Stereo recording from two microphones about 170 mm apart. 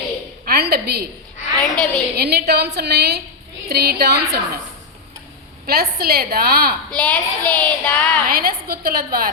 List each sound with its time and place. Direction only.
0.4 s a sound: 65° right (ahead or behind)
1.6 s a woman's voice: centre (ahead or behind)
2.1 s a woman's voice: 70° right (ahead or behind)
5.6 s a woman's voice: 65° right (ahead or behind)
6.9 s a woman's voice: 10° left (ahead or behind)
8.3 s a woman's voice: 60° right (ahead or behind)